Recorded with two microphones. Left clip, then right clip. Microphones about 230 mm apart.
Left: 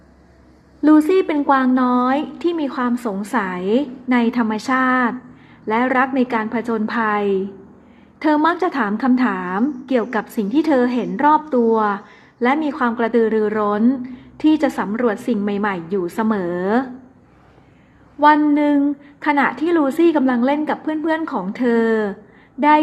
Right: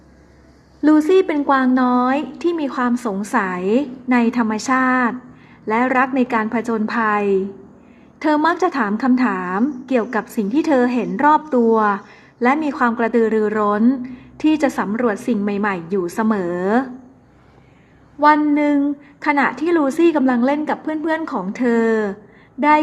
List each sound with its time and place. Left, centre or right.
0.8 s a woman's voice: centre
18.3 s a woman's voice: centre